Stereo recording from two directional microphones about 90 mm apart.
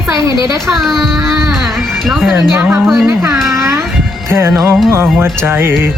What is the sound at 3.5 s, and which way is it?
Cat, 30° right (ahead or behind).